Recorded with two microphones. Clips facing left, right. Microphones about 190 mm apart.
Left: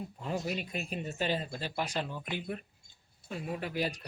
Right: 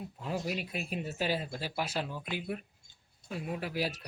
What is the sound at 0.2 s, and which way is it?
Speech, centre (ahead or behind).